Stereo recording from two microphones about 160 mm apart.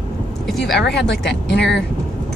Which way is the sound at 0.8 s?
90° left.